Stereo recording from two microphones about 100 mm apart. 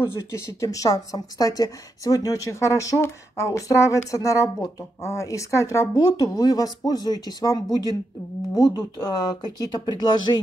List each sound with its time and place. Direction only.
0.0 s speech: 25° left (ahead or behind); by 10.4 s 45° left (ahead or behind)